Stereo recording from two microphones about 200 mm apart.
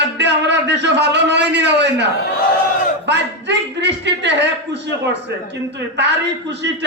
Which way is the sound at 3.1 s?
60° right (ahead or behind).